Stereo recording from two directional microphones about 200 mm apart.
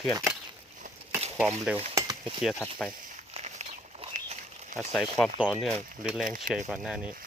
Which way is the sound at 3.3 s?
30° right (ahead or behind).